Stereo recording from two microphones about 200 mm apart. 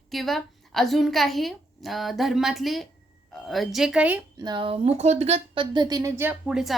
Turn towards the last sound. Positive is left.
turn(degrees=-5)  # may be behind; listen again after turning